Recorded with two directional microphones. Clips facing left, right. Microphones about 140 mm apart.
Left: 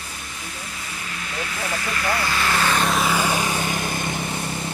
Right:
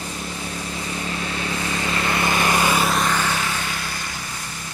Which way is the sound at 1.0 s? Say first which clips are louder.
Right 2 dB; 30° right (ahead or behind).